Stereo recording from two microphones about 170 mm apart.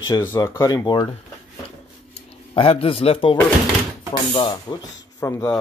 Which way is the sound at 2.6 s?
35° left (ahead or behind).